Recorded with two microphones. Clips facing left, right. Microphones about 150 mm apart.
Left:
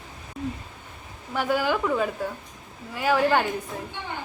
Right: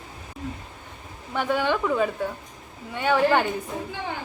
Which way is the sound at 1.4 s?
5° left (ahead or behind).